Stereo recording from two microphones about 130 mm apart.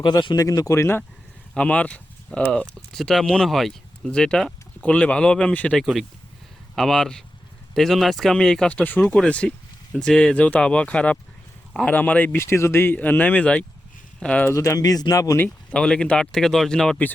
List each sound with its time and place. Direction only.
0.0 s speech: 35° left (ahead or behind); by 1.0 s 20° left (ahead or behind)
1.5 s speech: 10° left (ahead or behind)
14.4 s speech: 25° left (ahead or behind)
15.7 s speech: 5° left (ahead or behind)